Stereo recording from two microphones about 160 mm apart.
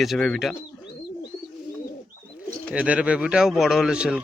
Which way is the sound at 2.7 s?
10° right (ahead or behind).